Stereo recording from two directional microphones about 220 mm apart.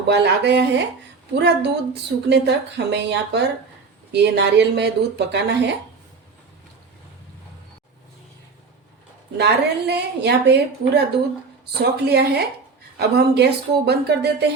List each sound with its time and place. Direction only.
0.1 s a woman's voice: 50° right (ahead or behind)
9.4 s a woman's voice: 50° right (ahead or behind)